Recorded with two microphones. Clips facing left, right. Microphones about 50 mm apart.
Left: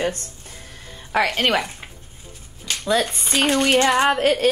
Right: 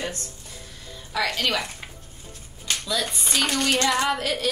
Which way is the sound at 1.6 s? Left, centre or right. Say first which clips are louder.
Left 3 dB; centre.